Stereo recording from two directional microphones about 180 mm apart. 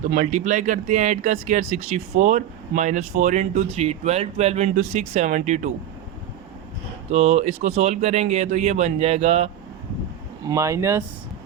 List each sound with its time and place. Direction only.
0.1 s speech: 40° right (ahead or behind)
7.1 s speech: 40° right (ahead or behind)
10.5 s speech: 15° right (ahead or behind)